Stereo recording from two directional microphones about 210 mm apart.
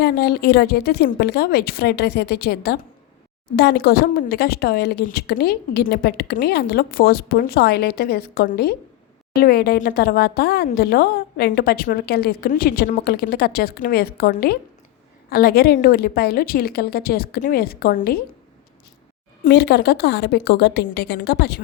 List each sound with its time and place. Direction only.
0.0 s speech: 50° left (ahead or behind)
19.5 s speech: 50° left (ahead or behind)